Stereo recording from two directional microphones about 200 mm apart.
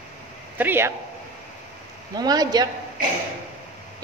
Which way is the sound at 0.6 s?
10° right (ahead or behind).